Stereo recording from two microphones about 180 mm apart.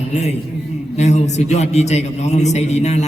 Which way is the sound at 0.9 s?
40° left (ahead or behind).